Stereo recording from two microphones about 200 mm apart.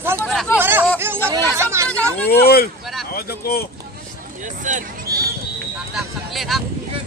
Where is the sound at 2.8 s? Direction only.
Centre (ahead or behind).